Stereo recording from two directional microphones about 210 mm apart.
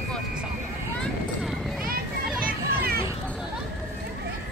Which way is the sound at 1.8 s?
45° right (ahead or behind).